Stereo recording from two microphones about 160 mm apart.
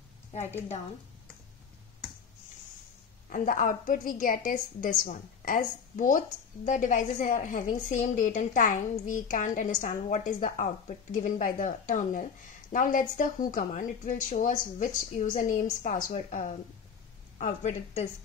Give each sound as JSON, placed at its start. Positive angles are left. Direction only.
{"t": 0.4, "sound": "a woman's voice", "side_deg": 15}
{"t": 3.3, "sound": "a woman's voice", "side_deg": 55}